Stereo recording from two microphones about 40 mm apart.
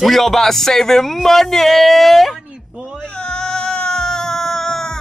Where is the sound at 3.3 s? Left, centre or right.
Centre.